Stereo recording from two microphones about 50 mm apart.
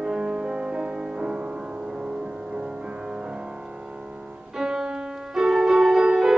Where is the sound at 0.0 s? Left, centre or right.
Centre.